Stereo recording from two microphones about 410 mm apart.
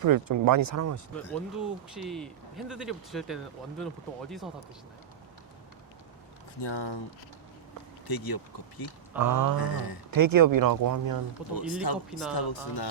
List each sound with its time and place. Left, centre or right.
0.0 s speech: right
1.1 s speech: centre
6.6 s speech: left
8.0 s speech: left
9.1 s speech: right
9.6 s speech: left
10.1 s speech: right
11.5 s speech: left